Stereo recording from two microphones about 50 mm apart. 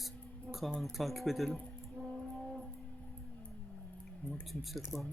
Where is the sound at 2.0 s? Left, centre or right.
Centre.